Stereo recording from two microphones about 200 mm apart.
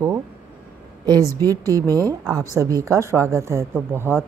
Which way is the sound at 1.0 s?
20° right (ahead or behind).